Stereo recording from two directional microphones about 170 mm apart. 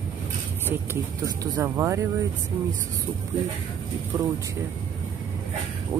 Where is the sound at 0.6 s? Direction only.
15° right (ahead or behind).